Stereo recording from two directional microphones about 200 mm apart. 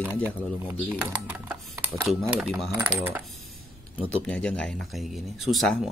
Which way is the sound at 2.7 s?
10° right (ahead or behind).